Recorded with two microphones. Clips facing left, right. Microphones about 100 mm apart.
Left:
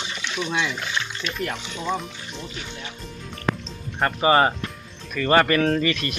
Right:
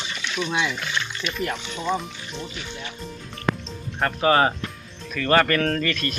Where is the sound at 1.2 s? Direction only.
5° right (ahead or behind).